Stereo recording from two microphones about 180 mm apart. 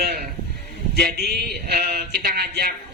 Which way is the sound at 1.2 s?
65° right (ahead or behind).